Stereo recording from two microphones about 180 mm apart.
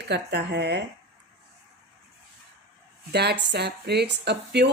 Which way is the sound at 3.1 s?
65° right (ahead or behind).